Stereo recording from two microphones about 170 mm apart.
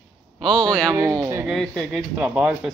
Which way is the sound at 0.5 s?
25° right (ahead or behind).